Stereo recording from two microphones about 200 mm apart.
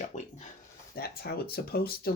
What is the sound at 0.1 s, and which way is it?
Dog, 35° left (ahead or behind).